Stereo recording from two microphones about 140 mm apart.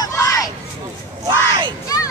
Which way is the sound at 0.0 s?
25° left (ahead or behind).